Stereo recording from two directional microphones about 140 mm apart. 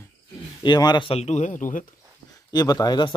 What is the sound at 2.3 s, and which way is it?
Speech, 30° left (ahead or behind).